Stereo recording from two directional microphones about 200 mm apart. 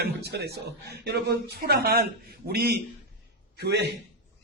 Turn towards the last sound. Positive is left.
turn(degrees=-55)  # may be behind; listen again after turning